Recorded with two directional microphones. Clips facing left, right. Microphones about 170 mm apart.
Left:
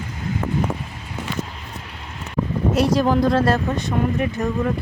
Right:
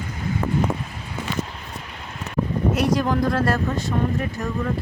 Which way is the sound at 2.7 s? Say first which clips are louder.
Left 4 dB; 30° left (ahead or behind).